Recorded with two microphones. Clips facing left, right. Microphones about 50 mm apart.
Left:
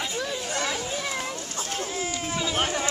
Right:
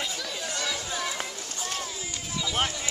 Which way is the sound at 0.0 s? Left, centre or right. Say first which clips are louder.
Left 3 dB; left.